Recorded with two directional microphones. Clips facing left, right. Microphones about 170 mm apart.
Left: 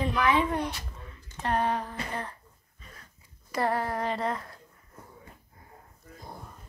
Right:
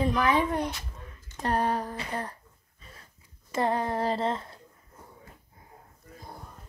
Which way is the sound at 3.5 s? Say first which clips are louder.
Right 1 dB; 20° right (ahead or behind).